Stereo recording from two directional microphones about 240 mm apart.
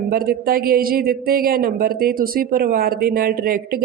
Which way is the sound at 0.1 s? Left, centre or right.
Right.